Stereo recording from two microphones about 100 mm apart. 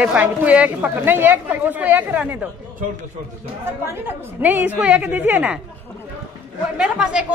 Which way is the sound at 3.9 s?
20° right (ahead or behind).